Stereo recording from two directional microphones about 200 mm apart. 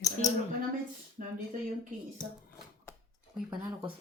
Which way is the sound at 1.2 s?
40° right (ahead or behind).